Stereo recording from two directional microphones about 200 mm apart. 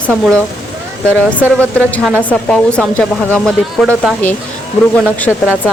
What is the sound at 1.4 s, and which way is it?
Speech, 10° right (ahead or behind).